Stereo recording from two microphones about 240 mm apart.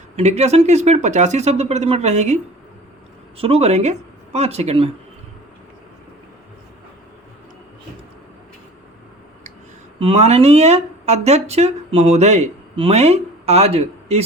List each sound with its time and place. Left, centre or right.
0.2 s speech: right
10.0 s speech: right